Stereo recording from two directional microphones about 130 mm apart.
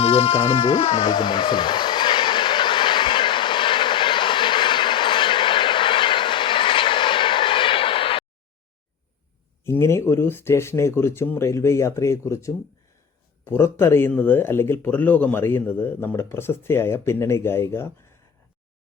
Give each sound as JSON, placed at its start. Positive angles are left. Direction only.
{"t": 0.0, "sound": "music", "side_deg": 50}
{"t": 9.6, "sound": "speech", "side_deg": 20}